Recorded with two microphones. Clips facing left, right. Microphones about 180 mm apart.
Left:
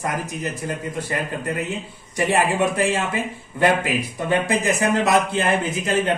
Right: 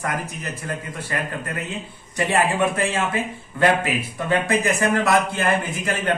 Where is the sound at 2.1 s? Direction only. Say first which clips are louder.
Left 1 dB; 15° left (ahead or behind).